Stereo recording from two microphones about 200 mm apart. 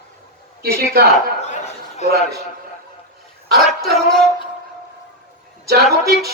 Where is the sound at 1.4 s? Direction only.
35° left (ahead or behind).